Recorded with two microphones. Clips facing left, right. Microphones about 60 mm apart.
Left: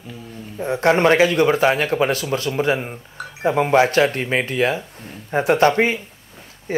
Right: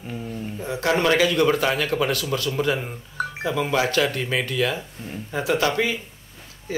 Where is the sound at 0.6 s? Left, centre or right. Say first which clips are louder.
Left 6 dB; left.